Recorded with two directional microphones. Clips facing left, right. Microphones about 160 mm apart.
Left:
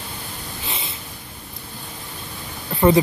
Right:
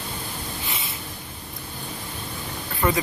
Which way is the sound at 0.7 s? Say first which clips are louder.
Left 1 dB; 30° left (ahead or behind).